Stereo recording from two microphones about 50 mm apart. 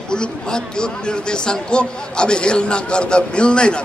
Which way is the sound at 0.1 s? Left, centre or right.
Centre.